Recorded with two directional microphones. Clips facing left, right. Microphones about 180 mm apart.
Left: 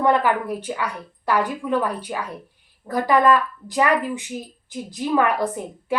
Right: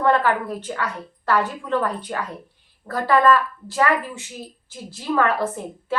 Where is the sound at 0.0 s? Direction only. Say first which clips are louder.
Even; 15° left (ahead or behind).